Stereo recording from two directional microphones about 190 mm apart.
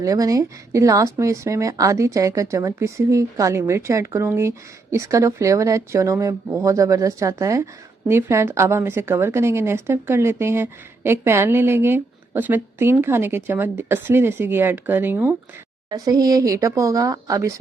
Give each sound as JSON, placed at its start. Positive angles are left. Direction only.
{"t": 0.0, "sound": "a woman's voice", "side_deg": -15}